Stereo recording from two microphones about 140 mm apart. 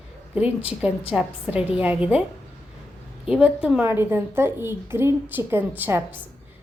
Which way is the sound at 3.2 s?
5° right (ahead or behind).